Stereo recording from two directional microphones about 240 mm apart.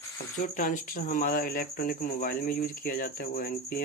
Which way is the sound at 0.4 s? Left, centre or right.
Left.